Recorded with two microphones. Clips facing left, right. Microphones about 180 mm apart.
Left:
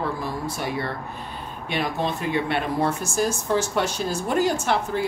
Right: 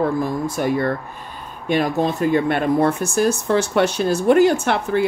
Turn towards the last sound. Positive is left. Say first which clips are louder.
# right 4 dB
turn(degrees=-65)  # may be behind; listen again after turning